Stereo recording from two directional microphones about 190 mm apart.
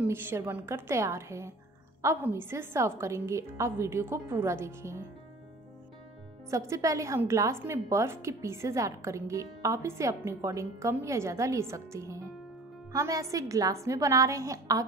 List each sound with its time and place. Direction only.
0.0 s a woman's voice: 10° right (ahead or behind)
6.5 s a woman's voice: 15° right (ahead or behind)